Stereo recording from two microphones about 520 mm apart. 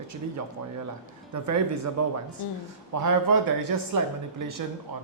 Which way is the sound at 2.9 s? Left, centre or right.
Right.